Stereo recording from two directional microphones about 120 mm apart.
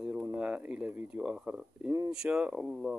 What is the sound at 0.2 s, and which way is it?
Speech, 10° right (ahead or behind).